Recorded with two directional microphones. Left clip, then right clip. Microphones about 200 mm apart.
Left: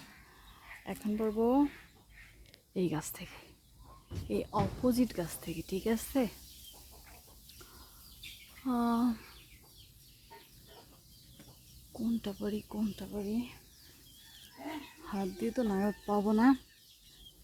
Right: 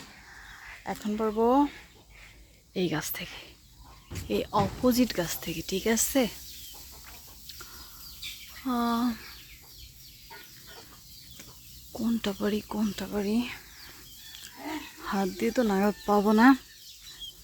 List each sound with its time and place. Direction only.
0.9 s speech: centre (ahead or behind)
2.7 s speech: 5° left (ahead or behind)
7.4 s chicken: 5° right (ahead or behind)
8.6 s speech: 5° left (ahead or behind)
11.9 s speech: 15° right (ahead or behind)
15.0 s speech: 15° right (ahead or behind)